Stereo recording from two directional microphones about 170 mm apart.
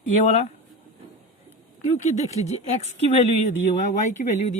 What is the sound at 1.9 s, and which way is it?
Speech, 45° left (ahead or behind).